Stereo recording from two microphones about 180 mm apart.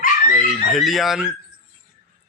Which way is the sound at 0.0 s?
45° left (ahead or behind).